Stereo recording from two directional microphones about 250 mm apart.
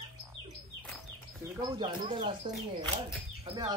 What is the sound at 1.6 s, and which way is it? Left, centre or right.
Speech, centre.